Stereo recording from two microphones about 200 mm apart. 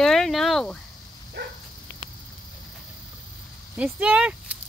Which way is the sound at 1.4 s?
60° right (ahead or behind).